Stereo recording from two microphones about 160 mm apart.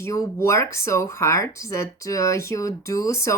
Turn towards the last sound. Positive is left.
turn(degrees=20)  # may be behind; listen again after turning